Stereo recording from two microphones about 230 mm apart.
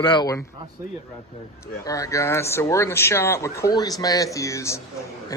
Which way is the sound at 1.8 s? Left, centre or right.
Centre.